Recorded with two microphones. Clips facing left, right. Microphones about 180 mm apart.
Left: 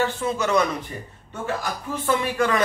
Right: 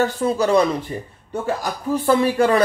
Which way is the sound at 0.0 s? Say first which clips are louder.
Right 5 dB; 35° right (ahead or behind).